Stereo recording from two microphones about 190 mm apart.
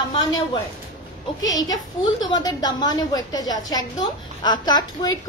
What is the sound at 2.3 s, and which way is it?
A woman's voice, 20° left (ahead or behind).